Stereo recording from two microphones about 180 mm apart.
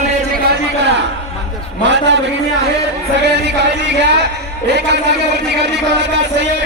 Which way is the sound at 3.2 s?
70° right (ahead or behind).